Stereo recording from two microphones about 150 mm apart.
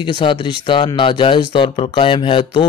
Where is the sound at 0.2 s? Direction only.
35° left (ahead or behind).